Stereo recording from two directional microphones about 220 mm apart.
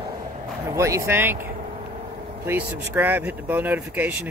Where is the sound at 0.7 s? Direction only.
15° right (ahead or behind).